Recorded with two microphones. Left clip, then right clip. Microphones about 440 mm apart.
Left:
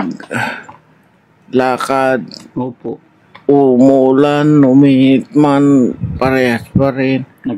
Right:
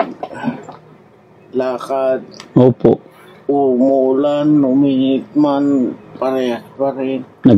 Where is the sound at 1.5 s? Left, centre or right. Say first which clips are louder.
Left 5 dB; left.